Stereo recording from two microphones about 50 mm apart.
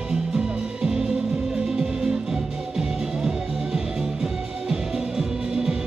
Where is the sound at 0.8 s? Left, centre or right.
Centre.